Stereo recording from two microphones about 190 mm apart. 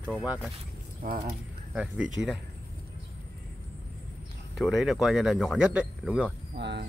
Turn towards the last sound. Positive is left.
turn(degrees=-65)  # may be behind; listen again after turning